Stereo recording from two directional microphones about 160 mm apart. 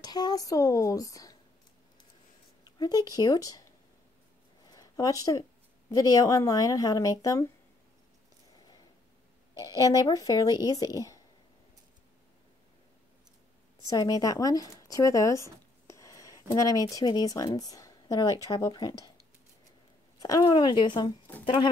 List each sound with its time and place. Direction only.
0.0 s speech: 25° left (ahead or behind)
2.8 s speech: 25° left (ahead or behind)
4.6 s a sound: 20° left (ahead or behind)
5.9 s speech: 20° left (ahead or behind)
8.5 s a sound: 25° left (ahead or behind)
9.6 s speech: 25° left (ahead or behind)
13.8 s speech: 25° left (ahead or behind)
20.2 s speech: 25° left (ahead or behind)